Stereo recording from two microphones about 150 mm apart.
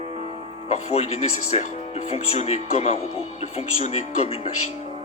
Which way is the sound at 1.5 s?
45° left (ahead or behind).